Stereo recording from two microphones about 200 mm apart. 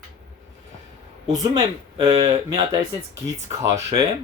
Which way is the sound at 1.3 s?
20° right (ahead or behind).